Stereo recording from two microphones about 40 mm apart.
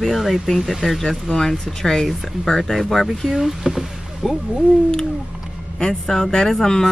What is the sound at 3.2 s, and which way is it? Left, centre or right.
Speech, centre.